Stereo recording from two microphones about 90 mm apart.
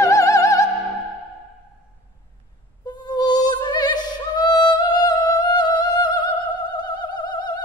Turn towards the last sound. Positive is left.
turn(degrees=55)  # may be behind; listen again after turning